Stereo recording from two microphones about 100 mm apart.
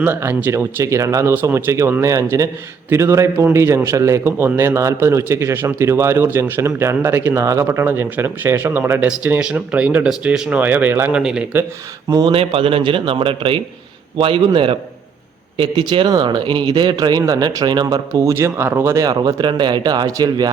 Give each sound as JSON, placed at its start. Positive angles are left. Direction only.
{"t": 0.0, "sound": "a man's voice", "side_deg": -20}
{"t": 11.2, "sound": "speech", "side_deg": -5}
{"t": 12.2, "sound": "speech", "side_deg": -65}
{"t": 18.9, "sound": "speech", "side_deg": -40}